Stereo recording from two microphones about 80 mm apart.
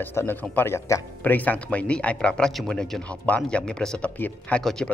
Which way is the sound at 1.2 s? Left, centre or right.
Left.